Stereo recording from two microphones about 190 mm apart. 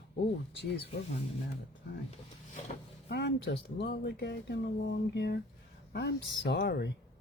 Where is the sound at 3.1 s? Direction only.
60° left (ahead or behind).